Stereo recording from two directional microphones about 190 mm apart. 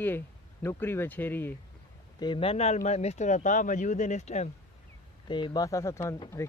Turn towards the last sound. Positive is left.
turn(degrees=15)  # may be behind; listen again after turning